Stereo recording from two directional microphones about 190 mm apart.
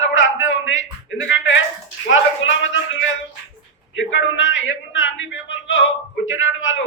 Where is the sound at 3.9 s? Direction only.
80° left.